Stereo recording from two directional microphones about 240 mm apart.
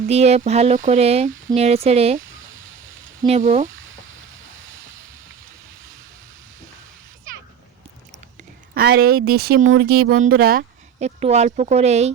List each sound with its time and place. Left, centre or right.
0.1 s speech: right
3.2 s speech: right
8.4 s a sound: right
9.2 s speech: right
11.2 s speech: right